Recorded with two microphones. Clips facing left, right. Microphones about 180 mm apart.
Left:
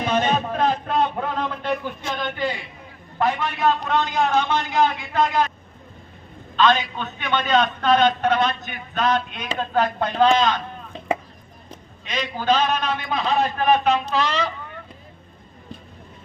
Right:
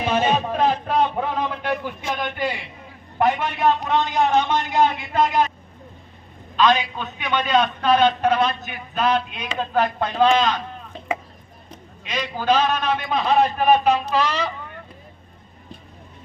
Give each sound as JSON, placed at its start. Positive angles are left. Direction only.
{"t": 0.0, "sound": "a man's voice", "side_deg": -10}
{"t": 6.6, "sound": "a man's voice", "side_deg": -10}
{"t": 12.0, "sound": "a man's voice", "side_deg": -10}